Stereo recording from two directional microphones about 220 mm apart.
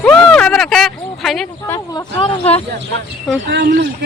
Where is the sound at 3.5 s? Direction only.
50° right (ahead or behind).